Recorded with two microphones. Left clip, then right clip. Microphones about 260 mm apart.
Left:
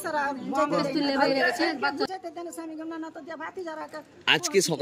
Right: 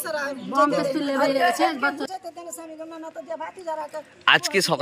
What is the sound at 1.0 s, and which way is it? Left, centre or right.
Speech, right.